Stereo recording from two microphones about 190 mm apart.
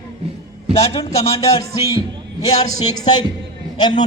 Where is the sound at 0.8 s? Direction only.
30° left (ahead or behind).